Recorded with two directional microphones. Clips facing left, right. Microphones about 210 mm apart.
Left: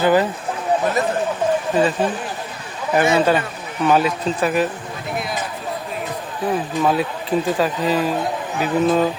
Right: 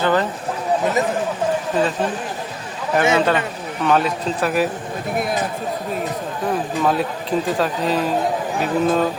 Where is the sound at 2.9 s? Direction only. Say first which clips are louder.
Left 1 dB; 5° left (ahead or behind).